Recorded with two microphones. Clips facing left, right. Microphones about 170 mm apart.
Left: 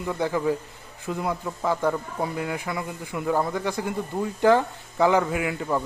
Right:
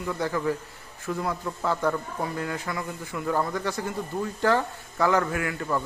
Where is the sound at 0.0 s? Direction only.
15° left (ahead or behind).